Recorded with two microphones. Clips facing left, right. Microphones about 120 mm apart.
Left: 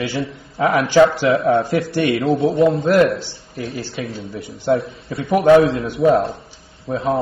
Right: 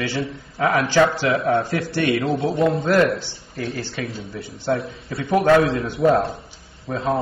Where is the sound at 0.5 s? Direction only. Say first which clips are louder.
Left 3 dB; 25° left (ahead or behind).